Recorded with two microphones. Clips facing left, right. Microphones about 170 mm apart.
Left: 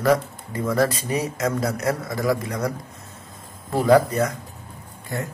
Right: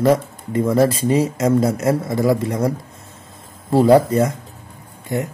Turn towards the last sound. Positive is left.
turn(degrees=-20)  # may be behind; listen again after turning